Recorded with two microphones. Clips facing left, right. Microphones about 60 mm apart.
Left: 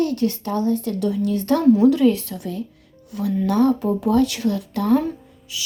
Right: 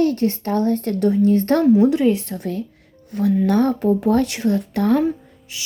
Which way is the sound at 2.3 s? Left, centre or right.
Right.